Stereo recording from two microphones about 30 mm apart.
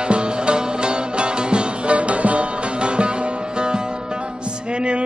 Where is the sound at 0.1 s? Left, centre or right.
Right.